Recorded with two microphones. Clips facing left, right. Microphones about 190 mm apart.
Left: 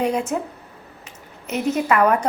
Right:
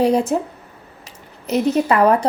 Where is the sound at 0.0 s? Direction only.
35° right (ahead or behind).